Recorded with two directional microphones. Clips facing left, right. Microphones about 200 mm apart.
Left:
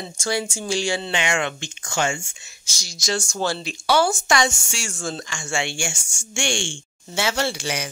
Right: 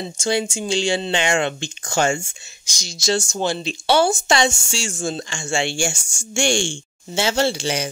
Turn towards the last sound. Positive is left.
turn(degrees=-30)  # may be behind; listen again after turning